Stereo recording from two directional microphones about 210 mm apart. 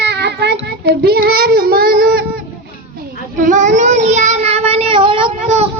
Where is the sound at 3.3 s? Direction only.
40° right (ahead or behind).